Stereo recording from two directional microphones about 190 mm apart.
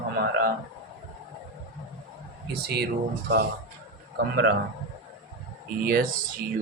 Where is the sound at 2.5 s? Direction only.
60° right (ahead or behind).